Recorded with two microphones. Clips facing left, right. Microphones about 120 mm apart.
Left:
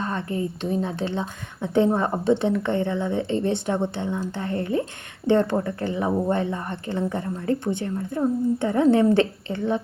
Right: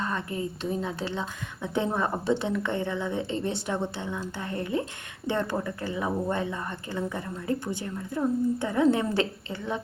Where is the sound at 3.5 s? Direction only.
20° left (ahead or behind).